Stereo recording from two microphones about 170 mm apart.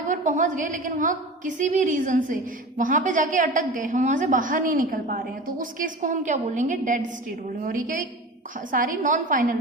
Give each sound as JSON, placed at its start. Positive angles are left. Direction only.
{"t": 0.1, "sound": "a woman's voice", "side_deg": -50}